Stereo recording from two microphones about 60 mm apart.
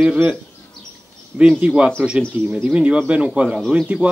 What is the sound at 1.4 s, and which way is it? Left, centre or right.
Speech, centre.